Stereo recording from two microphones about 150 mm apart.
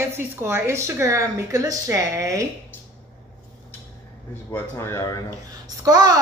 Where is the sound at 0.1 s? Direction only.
15° right (ahead or behind).